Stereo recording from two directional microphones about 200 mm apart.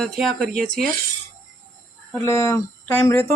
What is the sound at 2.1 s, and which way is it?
Speech, 15° left (ahead or behind).